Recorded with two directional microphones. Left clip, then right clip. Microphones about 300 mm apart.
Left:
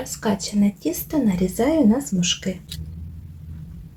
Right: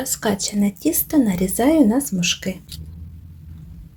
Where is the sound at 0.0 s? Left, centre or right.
Right.